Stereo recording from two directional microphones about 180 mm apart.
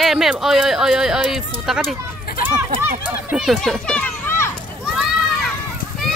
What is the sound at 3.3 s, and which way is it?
Children playing, centre (ahead or behind).